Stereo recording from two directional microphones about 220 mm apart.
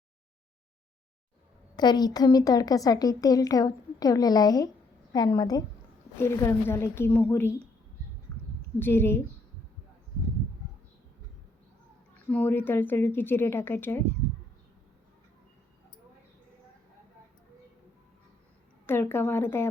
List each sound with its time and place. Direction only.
1.7 s speech: 20° left (ahead or behind)
8.3 s a sound: 5° left (ahead or behind)
8.8 s speech: 10° left (ahead or behind)
12.1 s speech: 5° left (ahead or behind)
18.9 s speech: 10° left (ahead or behind)